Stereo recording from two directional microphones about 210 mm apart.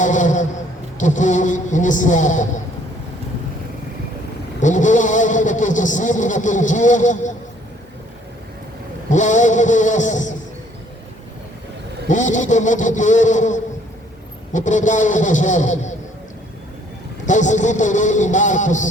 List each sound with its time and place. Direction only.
0.0 s a sound: 35° left (ahead or behind)
0.9 s speech: 35° left (ahead or behind)
4.6 s speech: 35° left (ahead or behind)
9.0 s speech: 35° left (ahead or behind)
12.0 s speech: 35° left (ahead or behind)
17.2 s speech: 35° left (ahead or behind)